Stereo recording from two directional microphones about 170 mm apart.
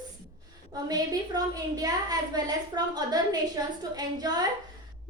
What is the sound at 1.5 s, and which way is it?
A woman's voice, 20° right (ahead or behind).